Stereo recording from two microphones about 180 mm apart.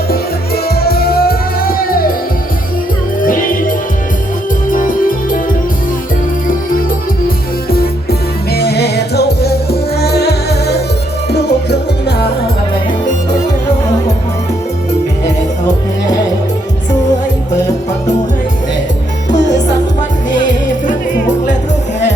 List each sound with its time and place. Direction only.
0.1 s music: 60° left (ahead or behind)
3.2 s music: 50° left (ahead or behind)
8.5 s music: 65° left (ahead or behind)
15.6 s music: 20° left (ahead or behind)
20.3 s music: 45° left (ahead or behind)